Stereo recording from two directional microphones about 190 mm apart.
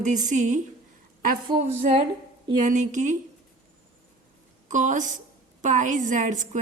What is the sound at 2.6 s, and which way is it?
Speech, 40° right (ahead or behind).